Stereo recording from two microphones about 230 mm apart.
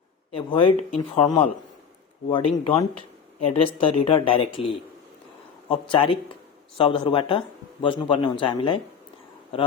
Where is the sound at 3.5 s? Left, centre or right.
Left.